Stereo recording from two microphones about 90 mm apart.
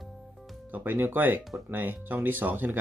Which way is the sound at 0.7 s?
20° right (ahead or behind).